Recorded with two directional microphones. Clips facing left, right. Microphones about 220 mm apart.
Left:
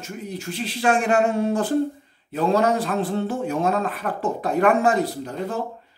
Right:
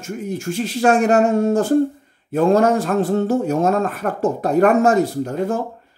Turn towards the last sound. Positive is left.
turn(degrees=-45)  # may be behind; listen again after turning